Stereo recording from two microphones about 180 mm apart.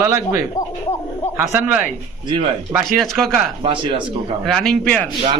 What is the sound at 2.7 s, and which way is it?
Speech, centre (ahead or behind).